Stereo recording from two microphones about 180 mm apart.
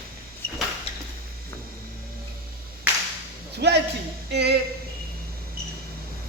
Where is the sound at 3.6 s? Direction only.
65° right (ahead or behind).